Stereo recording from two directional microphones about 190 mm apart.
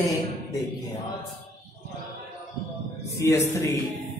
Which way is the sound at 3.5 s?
15° left (ahead or behind).